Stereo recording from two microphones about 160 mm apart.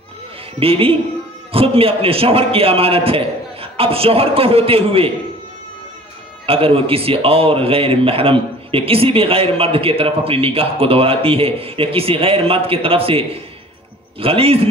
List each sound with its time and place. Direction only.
0.6 s a man's voice: 35° right (ahead or behind)
6.4 s a man's voice: 35° right (ahead or behind)